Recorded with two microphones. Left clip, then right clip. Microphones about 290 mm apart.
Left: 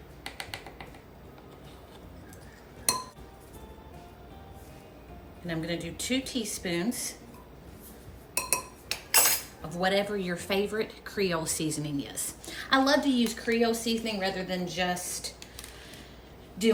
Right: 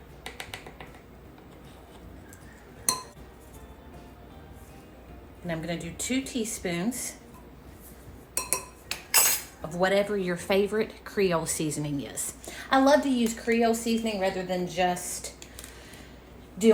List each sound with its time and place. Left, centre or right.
5.5 s a woman's voice: centre
8.4 s cutlery: centre
9.6 s a woman's voice: centre